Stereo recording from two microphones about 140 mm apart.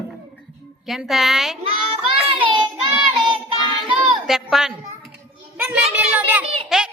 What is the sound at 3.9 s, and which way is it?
A woman's voice, centre (ahead or behind).